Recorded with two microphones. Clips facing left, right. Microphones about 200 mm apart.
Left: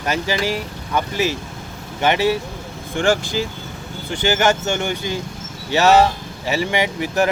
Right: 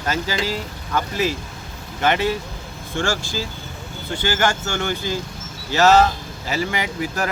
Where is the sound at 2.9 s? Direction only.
20° left (ahead or behind).